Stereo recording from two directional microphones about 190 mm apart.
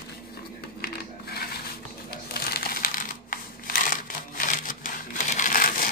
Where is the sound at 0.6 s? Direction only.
55° left (ahead or behind).